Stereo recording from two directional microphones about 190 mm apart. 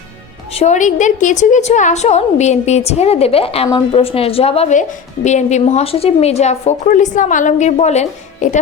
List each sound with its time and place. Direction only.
0.5 s a woman's voice: 35° left (ahead or behind)